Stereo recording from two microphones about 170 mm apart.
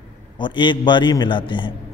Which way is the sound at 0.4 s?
30° left (ahead or behind).